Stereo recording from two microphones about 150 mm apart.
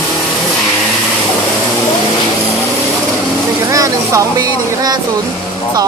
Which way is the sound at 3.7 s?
20° right (ahead or behind).